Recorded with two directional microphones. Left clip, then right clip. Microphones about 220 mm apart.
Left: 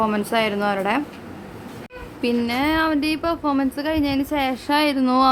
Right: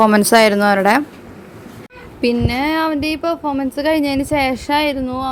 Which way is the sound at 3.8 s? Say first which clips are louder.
Right 6 dB; 20° right (ahead or behind).